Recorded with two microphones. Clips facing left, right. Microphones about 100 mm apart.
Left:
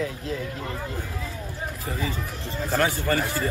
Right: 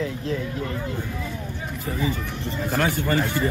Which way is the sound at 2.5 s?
Centre (ahead or behind).